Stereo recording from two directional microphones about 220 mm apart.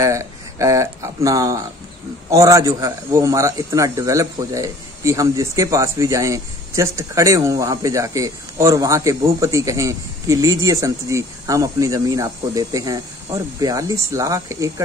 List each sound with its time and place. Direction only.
0.0 s speech: 15° right (ahead or behind)